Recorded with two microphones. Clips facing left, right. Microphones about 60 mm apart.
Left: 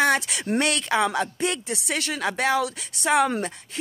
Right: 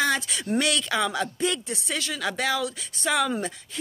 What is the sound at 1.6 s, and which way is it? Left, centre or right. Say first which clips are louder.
Speech: left 3 dB; left.